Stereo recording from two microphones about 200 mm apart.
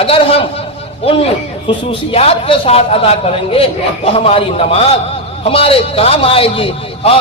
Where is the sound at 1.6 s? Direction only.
30° left (ahead or behind).